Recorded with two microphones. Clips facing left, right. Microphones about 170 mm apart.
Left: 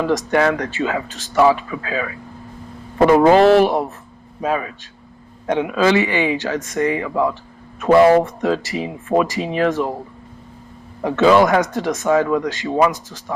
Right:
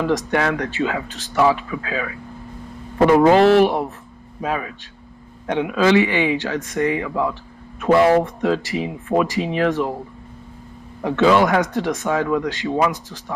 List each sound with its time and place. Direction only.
0.1 s speech: 40° left (ahead or behind)
3.1 s speech: 40° left (ahead or behind)
11.0 s speech: 40° left (ahead or behind)